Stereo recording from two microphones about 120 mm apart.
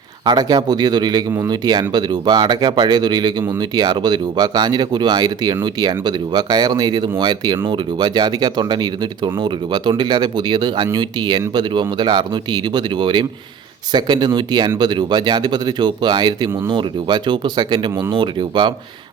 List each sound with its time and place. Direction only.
0.3 s speech: 35° right (ahead or behind)